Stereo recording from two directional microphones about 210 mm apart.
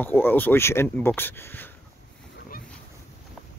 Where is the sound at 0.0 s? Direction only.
10° left (ahead or behind).